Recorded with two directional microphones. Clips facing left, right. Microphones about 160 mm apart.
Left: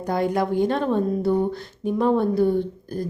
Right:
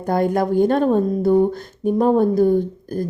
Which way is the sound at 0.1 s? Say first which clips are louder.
Right 4 dB; 50° right (ahead or behind).